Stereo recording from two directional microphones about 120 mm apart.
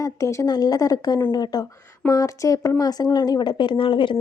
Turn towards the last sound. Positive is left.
turn(degrees=45)  # may be behind; listen again after turning